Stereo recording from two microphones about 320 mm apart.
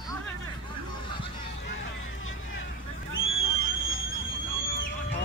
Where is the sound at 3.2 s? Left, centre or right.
Left.